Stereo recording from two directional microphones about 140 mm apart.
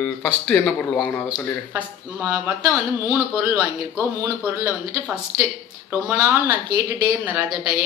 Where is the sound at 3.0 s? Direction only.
10° right (ahead or behind).